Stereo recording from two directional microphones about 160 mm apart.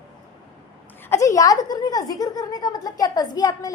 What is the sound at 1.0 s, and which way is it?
A woman's voice, 15° left (ahead or behind).